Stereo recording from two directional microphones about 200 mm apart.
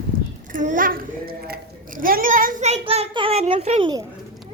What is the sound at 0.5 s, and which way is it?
A child's voice, 40° right (ahead or behind).